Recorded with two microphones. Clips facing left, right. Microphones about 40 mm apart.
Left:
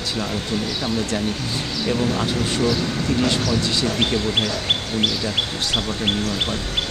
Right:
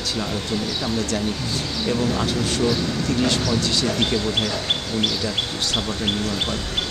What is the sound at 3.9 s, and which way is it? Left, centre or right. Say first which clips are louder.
Speech: left 1 dB; left.